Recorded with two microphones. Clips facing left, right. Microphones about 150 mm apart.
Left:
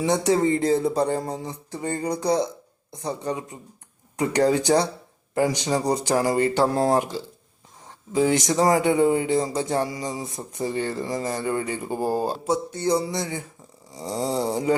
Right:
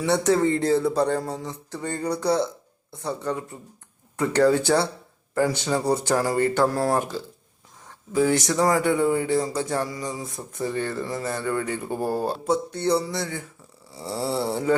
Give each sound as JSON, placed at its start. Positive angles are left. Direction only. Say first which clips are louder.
{"t": 0.0, "sound": "speech", "louder": "even", "side_deg": 15}
{"t": 8.1, "sound": "speech", "louder": "left 1 dB", "side_deg": 20}